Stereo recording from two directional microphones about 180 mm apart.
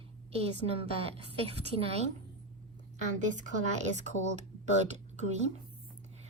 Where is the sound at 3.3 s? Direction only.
40° right (ahead or behind).